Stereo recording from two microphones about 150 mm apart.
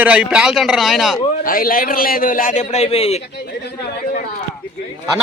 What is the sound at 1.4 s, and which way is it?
A man's voice, 70° left (ahead or behind).